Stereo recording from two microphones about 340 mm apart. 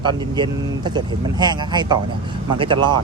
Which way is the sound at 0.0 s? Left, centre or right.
Centre.